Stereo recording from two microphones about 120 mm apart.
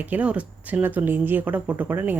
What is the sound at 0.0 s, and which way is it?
Speech, 10° right (ahead or behind).